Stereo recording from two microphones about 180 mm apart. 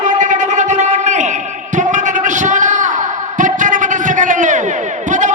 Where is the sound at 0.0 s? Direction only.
45° right (ahead or behind).